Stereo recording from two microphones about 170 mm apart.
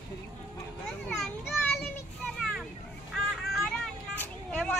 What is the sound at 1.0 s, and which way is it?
Children playing, centre (ahead or behind).